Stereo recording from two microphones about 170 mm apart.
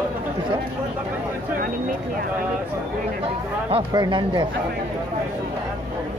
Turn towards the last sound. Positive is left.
turn(degrees=-25)  # may be behind; listen again after turning